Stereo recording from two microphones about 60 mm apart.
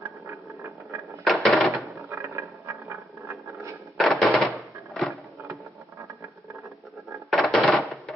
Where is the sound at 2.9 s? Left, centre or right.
Right.